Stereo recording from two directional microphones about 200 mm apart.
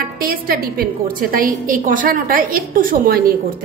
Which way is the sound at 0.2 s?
45° right (ahead or behind).